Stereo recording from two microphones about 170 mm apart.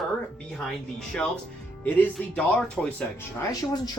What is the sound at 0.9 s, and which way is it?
Speech, 5° left (ahead or behind).